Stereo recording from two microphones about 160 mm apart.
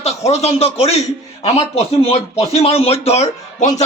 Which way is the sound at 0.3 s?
40° left (ahead or behind).